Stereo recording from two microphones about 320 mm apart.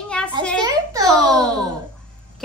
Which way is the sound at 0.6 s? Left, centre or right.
Centre.